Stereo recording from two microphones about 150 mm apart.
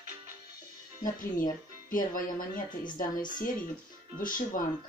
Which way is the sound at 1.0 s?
65° left (ahead or behind).